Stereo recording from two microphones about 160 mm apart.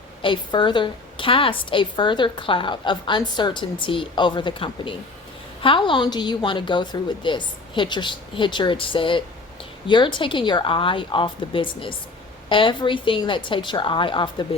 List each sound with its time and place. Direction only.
0.2 s a woman's voice: 30° left (ahead or behind)